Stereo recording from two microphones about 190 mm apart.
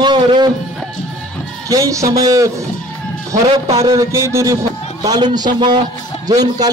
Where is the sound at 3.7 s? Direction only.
15° right (ahead or behind).